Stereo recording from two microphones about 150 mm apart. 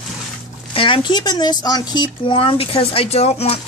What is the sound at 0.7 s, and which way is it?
Speech, 35° left (ahead or behind).